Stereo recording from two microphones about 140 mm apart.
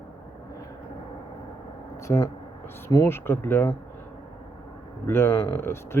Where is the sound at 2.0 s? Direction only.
20° left (ahead or behind).